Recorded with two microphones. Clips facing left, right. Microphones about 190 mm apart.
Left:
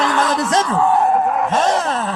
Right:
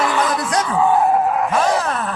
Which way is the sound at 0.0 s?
Centre (ahead or behind).